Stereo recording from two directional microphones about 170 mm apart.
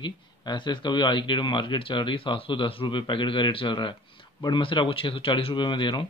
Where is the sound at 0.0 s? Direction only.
25° left (ahead or behind).